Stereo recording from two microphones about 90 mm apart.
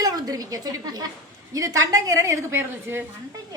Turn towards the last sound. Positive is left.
turn(degrees=-25)  # may be behind; listen again after turning